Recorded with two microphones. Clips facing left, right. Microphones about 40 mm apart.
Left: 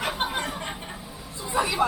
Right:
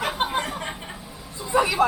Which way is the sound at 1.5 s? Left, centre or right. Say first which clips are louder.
Right 4 dB; centre.